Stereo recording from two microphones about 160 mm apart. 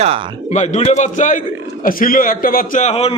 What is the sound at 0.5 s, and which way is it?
Speech, 45° left (ahead or behind).